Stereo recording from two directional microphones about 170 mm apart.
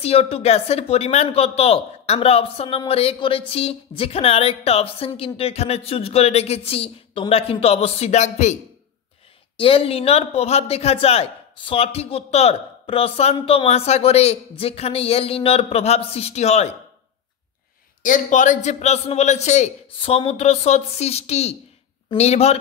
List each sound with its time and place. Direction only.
0.0 s speech: 35° left (ahead or behind)
9.6 s speech: 35° left (ahead or behind)
18.0 s speech: 50° left (ahead or behind)